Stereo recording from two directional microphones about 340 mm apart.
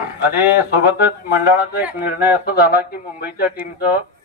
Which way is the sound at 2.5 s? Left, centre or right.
Left.